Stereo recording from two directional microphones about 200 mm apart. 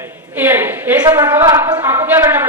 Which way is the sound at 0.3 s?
10° right (ahead or behind).